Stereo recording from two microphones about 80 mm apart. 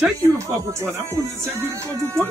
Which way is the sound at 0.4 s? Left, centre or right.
Right.